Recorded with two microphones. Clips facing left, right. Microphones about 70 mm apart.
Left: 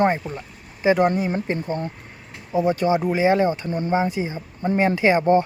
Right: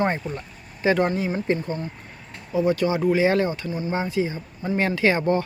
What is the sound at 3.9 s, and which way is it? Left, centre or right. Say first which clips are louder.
Speech: left 2 dB; centre.